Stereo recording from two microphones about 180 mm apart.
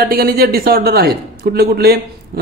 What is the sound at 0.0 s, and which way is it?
A man's voice, 55° right (ahead or behind).